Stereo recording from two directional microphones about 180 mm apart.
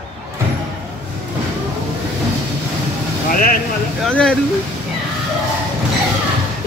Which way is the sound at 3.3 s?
55° left (ahead or behind).